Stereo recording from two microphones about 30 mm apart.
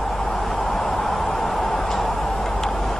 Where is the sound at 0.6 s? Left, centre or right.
Left.